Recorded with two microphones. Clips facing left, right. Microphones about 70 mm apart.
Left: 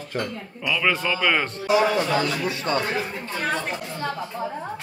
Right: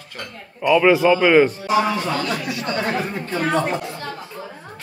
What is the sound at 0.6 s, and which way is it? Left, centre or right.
Speech, right.